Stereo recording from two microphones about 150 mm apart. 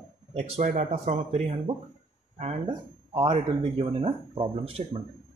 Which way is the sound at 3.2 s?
35° right (ahead or behind).